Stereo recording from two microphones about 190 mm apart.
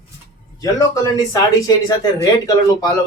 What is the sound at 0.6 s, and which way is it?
Speech, 20° left (ahead or behind).